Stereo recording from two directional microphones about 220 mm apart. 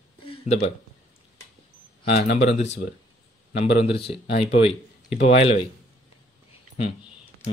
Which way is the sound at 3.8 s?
25° left (ahead or behind).